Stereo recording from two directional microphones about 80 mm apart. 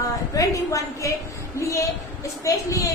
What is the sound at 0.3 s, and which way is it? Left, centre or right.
Speech, left.